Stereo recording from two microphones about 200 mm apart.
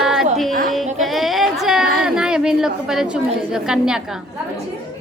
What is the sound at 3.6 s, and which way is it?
Speech, 5° right (ahead or behind).